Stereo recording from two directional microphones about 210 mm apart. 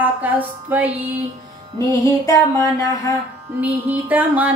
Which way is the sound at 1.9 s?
15° left (ahead or behind).